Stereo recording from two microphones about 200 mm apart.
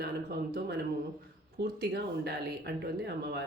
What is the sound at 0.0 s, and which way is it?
Speech, 55° right (ahead or behind).